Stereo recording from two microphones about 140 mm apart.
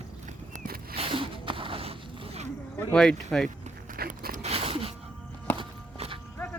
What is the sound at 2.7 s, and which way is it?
Speech, 5° left (ahead or behind).